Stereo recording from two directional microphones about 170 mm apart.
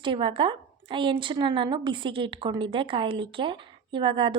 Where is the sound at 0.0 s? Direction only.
30° right (ahead or behind).